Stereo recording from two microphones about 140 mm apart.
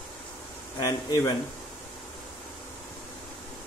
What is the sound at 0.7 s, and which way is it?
Speech, 25° left (ahead or behind).